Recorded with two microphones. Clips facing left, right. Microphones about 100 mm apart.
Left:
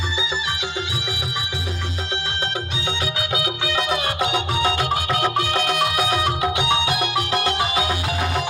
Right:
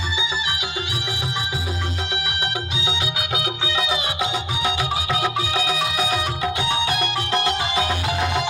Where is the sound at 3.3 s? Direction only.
25° right (ahead or behind).